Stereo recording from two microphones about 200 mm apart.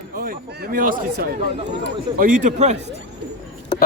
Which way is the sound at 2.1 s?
40° right (ahead or behind).